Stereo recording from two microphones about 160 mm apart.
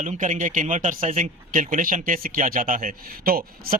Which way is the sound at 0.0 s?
50° right (ahead or behind).